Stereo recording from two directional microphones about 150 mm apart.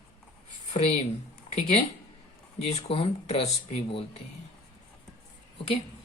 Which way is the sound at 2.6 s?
40° left (ahead or behind).